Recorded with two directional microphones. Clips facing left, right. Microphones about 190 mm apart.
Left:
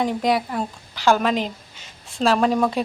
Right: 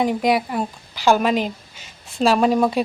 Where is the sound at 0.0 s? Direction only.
10° right (ahead or behind).